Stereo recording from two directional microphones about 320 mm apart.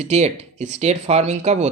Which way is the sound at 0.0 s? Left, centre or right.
Right.